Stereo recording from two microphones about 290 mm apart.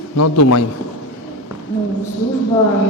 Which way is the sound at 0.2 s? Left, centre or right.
Left.